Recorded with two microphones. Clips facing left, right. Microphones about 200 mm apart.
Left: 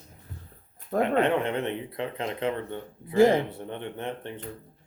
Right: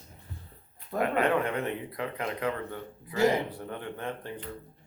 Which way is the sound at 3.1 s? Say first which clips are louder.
Left 6 dB; 50° left (ahead or behind).